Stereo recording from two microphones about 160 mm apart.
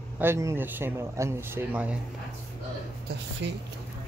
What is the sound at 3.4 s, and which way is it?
Speech, 90° right.